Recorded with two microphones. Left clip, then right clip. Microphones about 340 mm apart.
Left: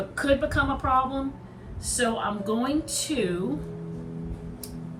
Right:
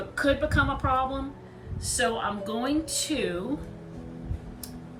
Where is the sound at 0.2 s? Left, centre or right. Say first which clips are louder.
Left 1 dB; centre.